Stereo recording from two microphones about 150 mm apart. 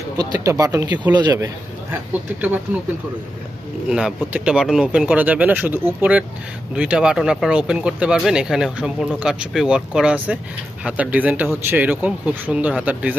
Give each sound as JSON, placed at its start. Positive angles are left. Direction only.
{"t": 0.2, "sound": "speech", "side_deg": -25}
{"t": 3.8, "sound": "speech", "side_deg": -5}